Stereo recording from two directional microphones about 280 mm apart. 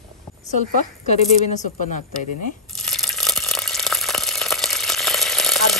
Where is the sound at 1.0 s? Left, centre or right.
Left.